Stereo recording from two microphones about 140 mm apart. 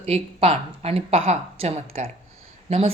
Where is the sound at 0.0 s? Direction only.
45° right (ahead or behind).